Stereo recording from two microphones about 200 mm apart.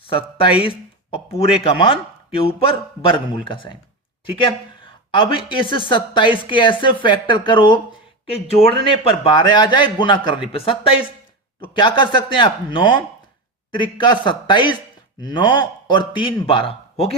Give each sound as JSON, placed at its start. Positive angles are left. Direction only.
{"t": 0.0, "sound": "a woman's voice", "side_deg": 25}
{"t": 5.1, "sound": "a woman's voice", "side_deg": 25}